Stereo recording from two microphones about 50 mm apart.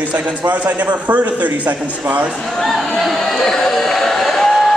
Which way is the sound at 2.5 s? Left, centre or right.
Centre.